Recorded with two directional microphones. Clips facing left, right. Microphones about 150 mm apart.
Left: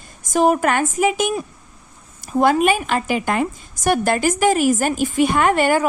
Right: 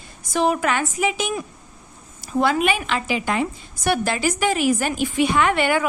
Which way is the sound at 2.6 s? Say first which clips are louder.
Left 4 dB; 45° left (ahead or behind).